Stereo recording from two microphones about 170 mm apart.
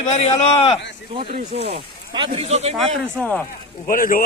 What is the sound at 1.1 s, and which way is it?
Speech, 35° right (ahead or behind).